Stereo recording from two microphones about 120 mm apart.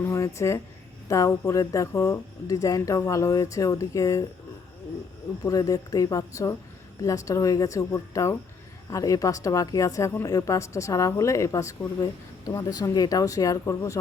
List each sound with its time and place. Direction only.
0.0 s a sound: 25° left (ahead or behind)
1.0 s speech: 25° left (ahead or behind)
5.5 s speech: 30° left (ahead or behind)